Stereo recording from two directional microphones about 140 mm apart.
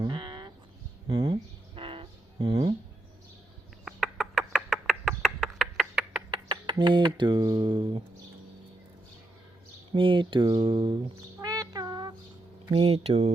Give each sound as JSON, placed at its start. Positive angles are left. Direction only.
{"t": 0.0, "sound": "a sound", "side_deg": -35}
{"t": 3.8, "sound": "bird", "side_deg": 0}
{"t": 6.3, "sound": "speech", "side_deg": -30}
{"t": 9.9, "sound": "speech", "side_deg": -35}
{"t": 11.3, "sound": "a sound", "side_deg": -25}
{"t": 12.6, "sound": "speech", "side_deg": -40}